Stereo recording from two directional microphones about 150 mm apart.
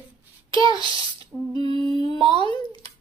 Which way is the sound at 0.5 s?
25° left (ahead or behind).